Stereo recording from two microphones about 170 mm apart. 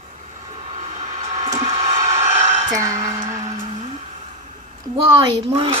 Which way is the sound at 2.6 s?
20° right (ahead or behind).